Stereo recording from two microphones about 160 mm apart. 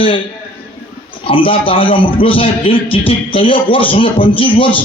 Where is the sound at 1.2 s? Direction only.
35° left (ahead or behind).